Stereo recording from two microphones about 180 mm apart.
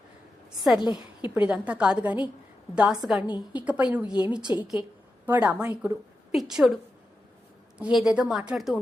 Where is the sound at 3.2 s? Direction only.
25° left (ahead or behind).